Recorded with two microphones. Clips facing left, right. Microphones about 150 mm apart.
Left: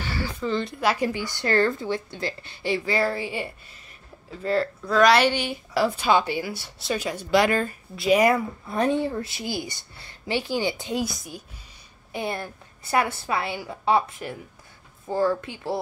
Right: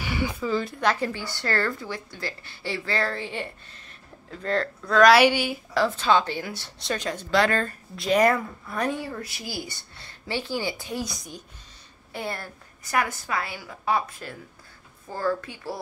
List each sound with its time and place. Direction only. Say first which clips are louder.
0.0 s a sound: right 2 dB; 15° right (ahead or behind)
0.4 s a woman's voice: even; 5° right (ahead or behind)
0.8 s a woman's voice: left 3 dB; 15° left (ahead or behind); by 5.6 s 10° right (ahead or behind)
5.8 s a woman's voice: left 1 dB; 10° left (ahead or behind)
8.6 s a woman's voice: left 6 dB; 25° left (ahead or behind)
11.1 s a woman's voice: left 2 dB; 5° left (ahead or behind)
12.1 s a woman's voice: left 3 dB; 20° left (ahead or behind)